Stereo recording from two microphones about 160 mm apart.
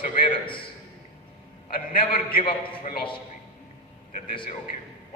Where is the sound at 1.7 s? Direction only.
60° left (ahead or behind).